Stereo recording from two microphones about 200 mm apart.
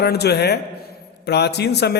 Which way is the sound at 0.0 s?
55° left (ahead or behind).